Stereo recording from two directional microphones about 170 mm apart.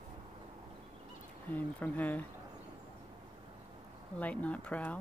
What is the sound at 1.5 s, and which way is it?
Speech, 10° left (ahead or behind).